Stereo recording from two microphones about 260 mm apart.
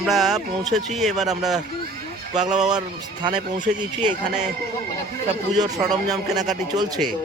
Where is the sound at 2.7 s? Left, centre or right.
Centre.